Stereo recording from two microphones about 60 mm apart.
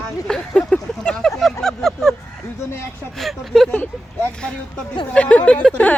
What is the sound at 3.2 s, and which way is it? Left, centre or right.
Speech, centre.